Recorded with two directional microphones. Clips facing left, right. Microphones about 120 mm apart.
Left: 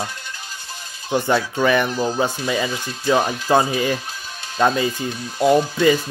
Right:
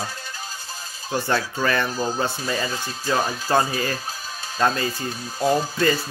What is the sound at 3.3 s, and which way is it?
Speech, 15° left (ahead or behind).